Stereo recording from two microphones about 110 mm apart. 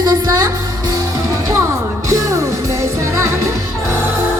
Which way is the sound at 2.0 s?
30° right (ahead or behind).